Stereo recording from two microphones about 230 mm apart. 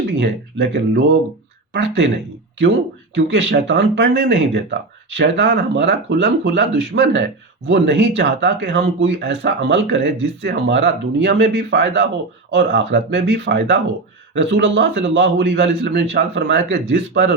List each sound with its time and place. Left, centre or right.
0.2 s speech: right
3.2 s speech: right